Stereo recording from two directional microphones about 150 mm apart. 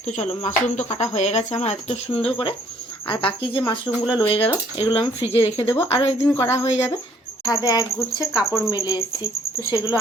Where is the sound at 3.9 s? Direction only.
5° left (ahead or behind).